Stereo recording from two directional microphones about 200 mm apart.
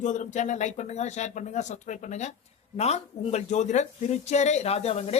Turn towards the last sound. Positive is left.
turn(degrees=30)  # may be behind; listen again after turning